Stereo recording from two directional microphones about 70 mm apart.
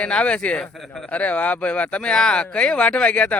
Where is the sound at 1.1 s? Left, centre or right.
Centre.